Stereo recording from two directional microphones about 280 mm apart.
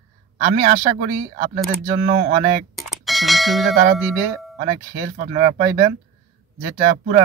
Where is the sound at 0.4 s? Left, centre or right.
Right.